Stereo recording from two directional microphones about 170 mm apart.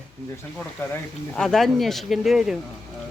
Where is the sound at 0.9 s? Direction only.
5° left (ahead or behind).